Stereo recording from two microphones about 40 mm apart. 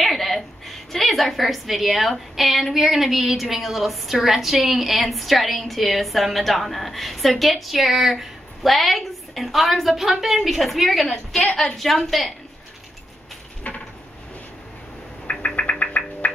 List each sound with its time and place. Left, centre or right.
0.0 s a woman's voice: centre
13.7 s a sound: left
15.4 s knock: left